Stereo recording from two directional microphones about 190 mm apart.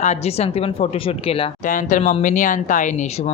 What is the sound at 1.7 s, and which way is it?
Speech, 45° left (ahead or behind).